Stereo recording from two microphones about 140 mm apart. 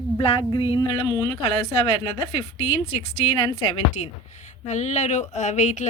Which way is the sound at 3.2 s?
40° left (ahead or behind).